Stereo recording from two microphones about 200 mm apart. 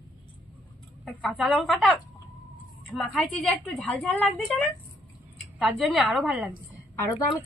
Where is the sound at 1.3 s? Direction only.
Centre (ahead or behind).